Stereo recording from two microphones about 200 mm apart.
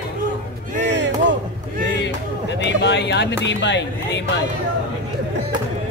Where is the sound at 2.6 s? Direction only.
60° left (ahead or behind).